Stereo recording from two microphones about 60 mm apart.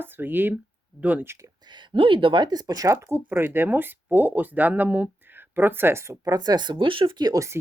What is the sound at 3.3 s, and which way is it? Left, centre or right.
A woman's voice, right.